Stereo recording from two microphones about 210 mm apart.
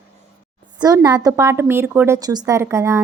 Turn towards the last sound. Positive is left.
turn(degrees=-15)  # may be behind; listen again after turning